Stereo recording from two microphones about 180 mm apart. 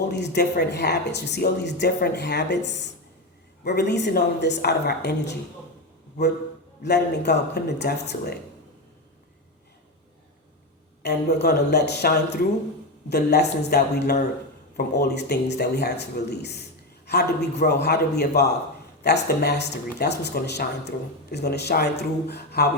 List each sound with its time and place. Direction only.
0.1 s speech: 65° left (ahead or behind)
6.8 s speech: 70° left (ahead or behind)
11.0 s a man's voice: 70° left (ahead or behind)